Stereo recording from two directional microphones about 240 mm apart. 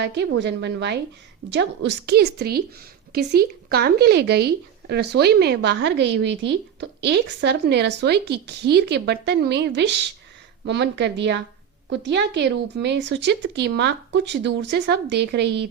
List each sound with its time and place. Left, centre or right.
0.0 s speech: right